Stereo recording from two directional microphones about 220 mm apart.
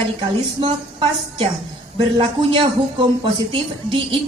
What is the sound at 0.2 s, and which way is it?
A man's voice, 25° right (ahead or behind).